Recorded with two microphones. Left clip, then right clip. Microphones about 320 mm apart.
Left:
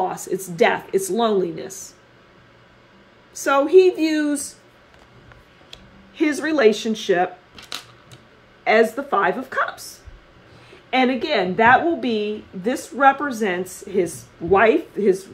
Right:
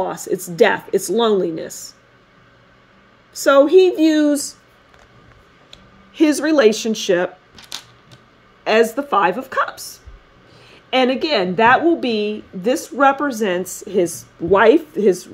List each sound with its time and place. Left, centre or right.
0.6 s speech: right
3.7 s speech: right
6.1 s a woman's voice: right
8.6 s a woman's voice: right
10.9 s a woman's voice: right